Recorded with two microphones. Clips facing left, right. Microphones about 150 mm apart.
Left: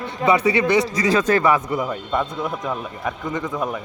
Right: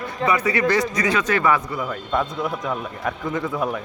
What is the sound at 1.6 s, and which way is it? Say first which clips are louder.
Speech: left 4 dB; 15° left (ahead or behind).